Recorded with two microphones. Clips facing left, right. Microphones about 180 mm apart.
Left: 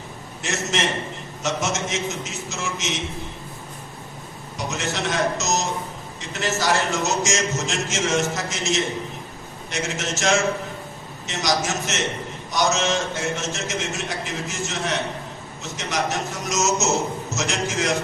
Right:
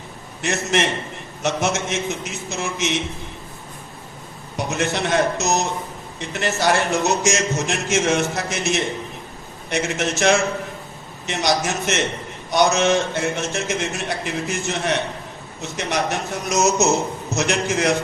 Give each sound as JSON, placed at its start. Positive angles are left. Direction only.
{"t": 0.4, "sound": "a man's voice", "side_deg": -60}
{"t": 4.5, "sound": "a man's voice", "side_deg": -60}